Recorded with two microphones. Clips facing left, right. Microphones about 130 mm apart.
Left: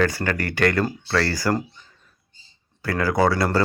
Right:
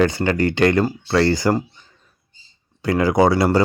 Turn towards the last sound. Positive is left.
turn(degrees=-20)  # may be behind; listen again after turning